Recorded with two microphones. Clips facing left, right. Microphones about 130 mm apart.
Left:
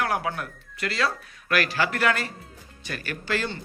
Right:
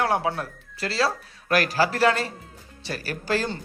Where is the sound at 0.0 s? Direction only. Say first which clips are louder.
Right 3 dB; 30° right (ahead or behind).